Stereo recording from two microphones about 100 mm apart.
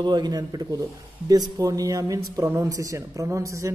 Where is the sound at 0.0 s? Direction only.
45° right (ahead or behind).